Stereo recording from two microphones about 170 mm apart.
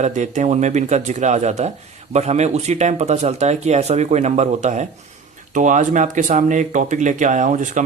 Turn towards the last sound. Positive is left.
turn(degrees=-45)  # may be behind; listen again after turning